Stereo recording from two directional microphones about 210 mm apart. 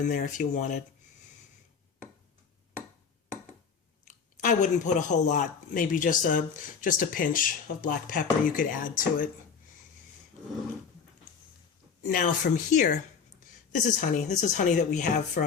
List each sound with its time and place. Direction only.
0.1 s speech: 35° left (ahead or behind)
4.4 s speech: 40° left (ahead or behind)
12.0 s speech: 40° left (ahead or behind)